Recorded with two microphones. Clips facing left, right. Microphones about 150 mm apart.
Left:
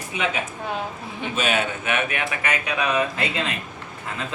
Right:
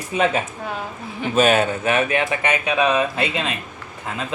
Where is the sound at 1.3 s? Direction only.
45° right (ahead or behind).